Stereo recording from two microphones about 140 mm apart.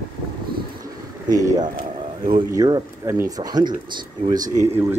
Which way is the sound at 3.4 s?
30° right (ahead or behind).